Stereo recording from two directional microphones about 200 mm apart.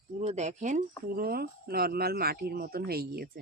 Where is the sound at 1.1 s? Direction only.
50° right (ahead or behind).